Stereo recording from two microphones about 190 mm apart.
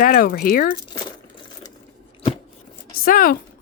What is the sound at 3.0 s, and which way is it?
Speech, 50° left (ahead or behind).